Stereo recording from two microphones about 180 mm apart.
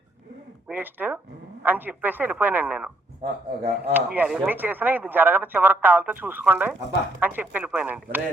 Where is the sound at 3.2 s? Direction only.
35° right (ahead or behind).